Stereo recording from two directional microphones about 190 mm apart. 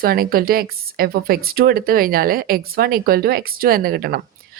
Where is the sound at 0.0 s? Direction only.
50° right (ahead or behind).